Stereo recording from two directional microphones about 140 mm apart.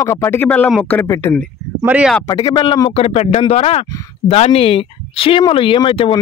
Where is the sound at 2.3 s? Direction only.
30° left (ahead or behind).